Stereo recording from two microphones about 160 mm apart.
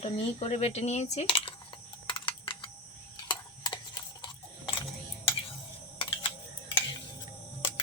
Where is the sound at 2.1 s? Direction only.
30° left (ahead or behind).